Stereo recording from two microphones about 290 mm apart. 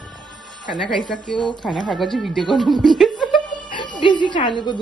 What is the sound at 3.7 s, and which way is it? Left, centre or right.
Speech, centre.